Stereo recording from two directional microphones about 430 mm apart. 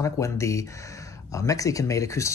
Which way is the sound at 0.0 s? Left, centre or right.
Centre.